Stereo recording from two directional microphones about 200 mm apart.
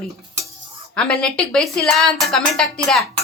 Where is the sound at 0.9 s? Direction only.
5° left (ahead or behind).